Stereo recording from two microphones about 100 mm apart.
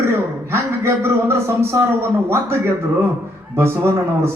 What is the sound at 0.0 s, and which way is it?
A man's voice, 25° right (ahead or behind).